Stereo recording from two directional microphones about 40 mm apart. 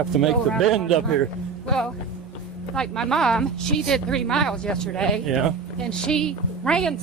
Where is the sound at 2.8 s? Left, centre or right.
Centre.